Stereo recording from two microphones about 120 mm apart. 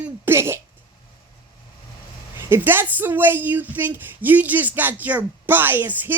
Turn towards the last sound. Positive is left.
turn(degrees=-20)  # may be behind; listen again after turning